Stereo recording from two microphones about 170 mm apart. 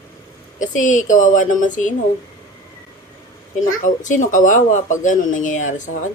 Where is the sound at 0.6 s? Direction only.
50° left (ahead or behind).